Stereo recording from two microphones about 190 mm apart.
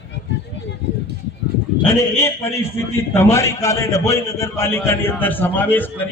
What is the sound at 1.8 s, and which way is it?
A man's voice, 15° left (ahead or behind).